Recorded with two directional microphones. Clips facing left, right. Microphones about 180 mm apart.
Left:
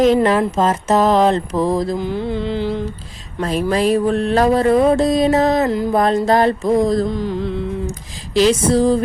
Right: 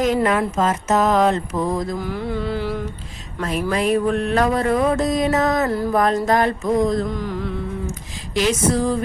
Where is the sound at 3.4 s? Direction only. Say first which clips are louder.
Left 4 dB; 30° left (ahead or behind).